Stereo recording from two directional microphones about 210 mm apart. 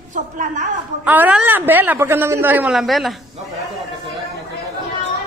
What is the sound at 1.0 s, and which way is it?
A man's voice, 10° right (ahead or behind).